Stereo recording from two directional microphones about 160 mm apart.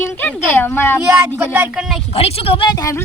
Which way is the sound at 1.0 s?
15° right (ahead or behind).